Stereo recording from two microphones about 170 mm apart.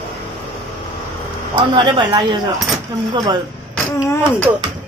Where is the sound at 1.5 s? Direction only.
25° right (ahead or behind).